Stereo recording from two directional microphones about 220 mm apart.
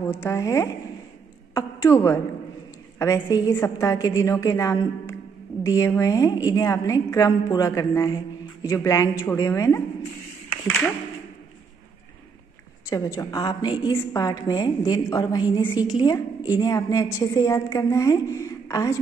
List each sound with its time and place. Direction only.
0.0 s a woman's voice: 10° left (ahead or behind)
12.9 s a woman's voice: 15° left (ahead or behind)